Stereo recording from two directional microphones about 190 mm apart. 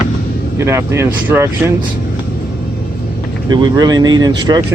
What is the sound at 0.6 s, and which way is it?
Speech, 15° right (ahead or behind).